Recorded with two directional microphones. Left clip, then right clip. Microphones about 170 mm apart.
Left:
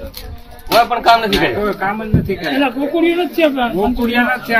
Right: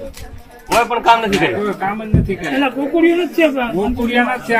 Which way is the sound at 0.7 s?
15° left (ahead or behind).